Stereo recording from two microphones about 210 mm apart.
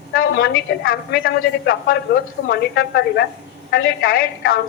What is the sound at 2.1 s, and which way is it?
A woman's voice, 50° left (ahead or behind).